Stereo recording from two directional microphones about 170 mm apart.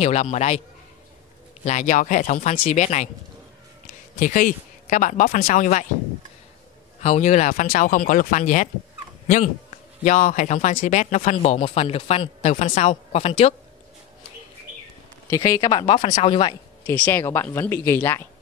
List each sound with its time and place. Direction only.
0.0 s a man's voice: 40° left (ahead or behind)
1.6 s speech: 45° left (ahead or behind)
4.2 s speech: 50° left (ahead or behind)
7.0 s speech: 45° left (ahead or behind)
10.0 s speech: 50° left (ahead or behind)
15.2 s a man's voice: 20° left (ahead or behind)
16.8 s speech: 10° left (ahead or behind)